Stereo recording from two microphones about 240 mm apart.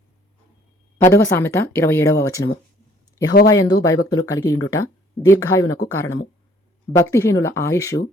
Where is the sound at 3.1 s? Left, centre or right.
Centre.